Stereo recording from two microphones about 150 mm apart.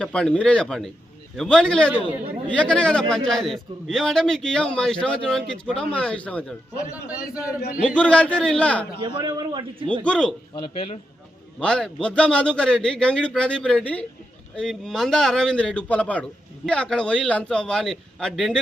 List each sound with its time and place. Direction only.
0.0 s a man's voice: 5° left (ahead or behind)
1.9 s a man's voice: 10° right (ahead or behind)
2.5 s a man's voice: 5° left (ahead or behind)
6.9 s a man's voice: 10° right (ahead or behind)
7.9 s a man's voice: 5° left (ahead or behind)
9.0 s a man's voice: 30° right (ahead or behind)
10.0 s a man's voice: 5° left (ahead or behind)
10.5 s a man's voice: 35° left (ahead or behind)
11.6 s a man's voice: 5° left (ahead or behind)